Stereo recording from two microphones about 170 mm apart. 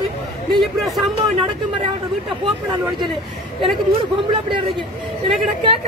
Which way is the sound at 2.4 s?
30° right (ahead or behind).